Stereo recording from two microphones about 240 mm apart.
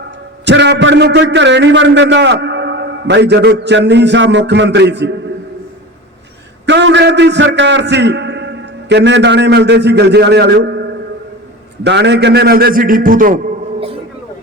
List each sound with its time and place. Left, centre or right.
0.4 s a man's voice: right
6.7 s a man's voice: right
11.8 s a man's voice: right
13.7 s a sound: right